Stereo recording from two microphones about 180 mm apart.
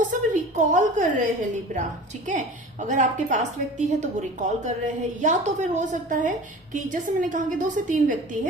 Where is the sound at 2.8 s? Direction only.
40° right (ahead or behind).